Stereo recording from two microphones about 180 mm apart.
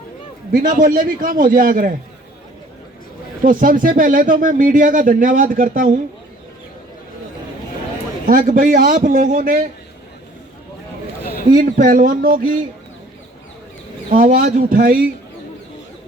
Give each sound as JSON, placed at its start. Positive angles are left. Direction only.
{"t": 0.5, "sound": "speech", "side_deg": -50}
{"t": 3.4, "sound": "speech", "side_deg": -50}
{"t": 8.3, "sound": "speech", "side_deg": -50}
{"t": 11.5, "sound": "speech", "side_deg": -50}
{"t": 14.1, "sound": "speech", "side_deg": -50}